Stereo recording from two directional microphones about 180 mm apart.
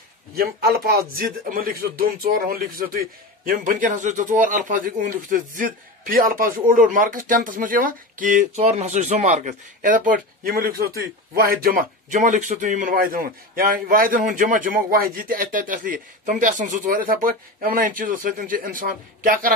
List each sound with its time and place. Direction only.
0.4 s speech: 55° right (ahead or behind)